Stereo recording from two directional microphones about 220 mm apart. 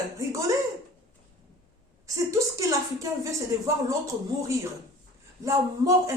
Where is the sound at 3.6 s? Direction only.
15° right (ahead or behind).